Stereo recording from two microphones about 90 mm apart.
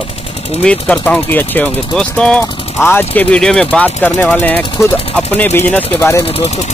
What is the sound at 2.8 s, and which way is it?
Speech, 20° left (ahead or behind).